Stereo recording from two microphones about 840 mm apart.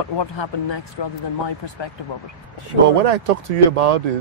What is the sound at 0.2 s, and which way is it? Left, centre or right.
A woman's voice, left.